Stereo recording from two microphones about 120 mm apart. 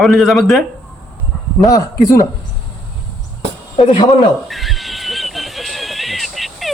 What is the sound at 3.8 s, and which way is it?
Speech, 45° left (ahead or behind).